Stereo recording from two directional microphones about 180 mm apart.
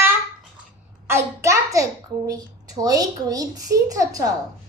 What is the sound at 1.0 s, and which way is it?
Hands, 15° right (ahead or behind).